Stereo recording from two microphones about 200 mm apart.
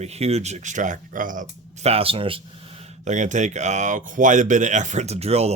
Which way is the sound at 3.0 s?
40° right (ahead or behind).